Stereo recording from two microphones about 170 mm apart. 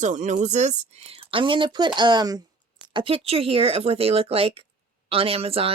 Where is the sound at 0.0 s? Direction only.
45° right (ahead or behind).